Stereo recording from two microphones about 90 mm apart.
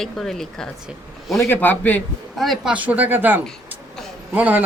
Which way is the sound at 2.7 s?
15° right (ahead or behind).